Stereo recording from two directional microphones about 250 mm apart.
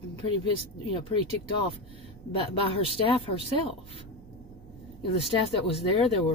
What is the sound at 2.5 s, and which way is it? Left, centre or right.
Speech, left.